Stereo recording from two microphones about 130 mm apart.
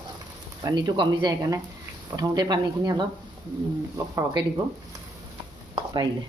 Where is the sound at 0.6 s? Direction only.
35° right (ahead or behind).